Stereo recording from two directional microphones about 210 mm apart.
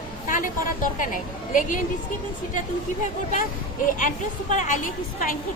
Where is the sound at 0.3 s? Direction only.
40° left (ahead or behind).